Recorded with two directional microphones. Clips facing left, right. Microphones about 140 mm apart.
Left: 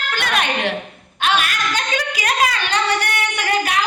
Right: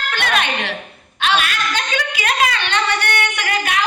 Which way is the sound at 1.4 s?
40° left (ahead or behind).